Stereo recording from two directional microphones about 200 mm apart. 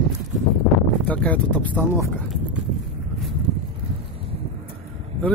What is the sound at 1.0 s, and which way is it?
Speech, 5° left (ahead or behind).